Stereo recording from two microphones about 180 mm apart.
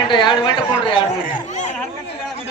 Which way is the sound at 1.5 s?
40° left (ahead or behind).